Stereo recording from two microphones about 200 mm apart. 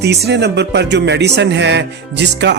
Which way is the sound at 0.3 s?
55° right (ahead or behind).